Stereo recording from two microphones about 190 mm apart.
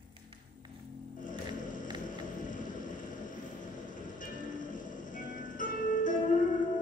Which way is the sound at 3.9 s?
45° left (ahead or behind).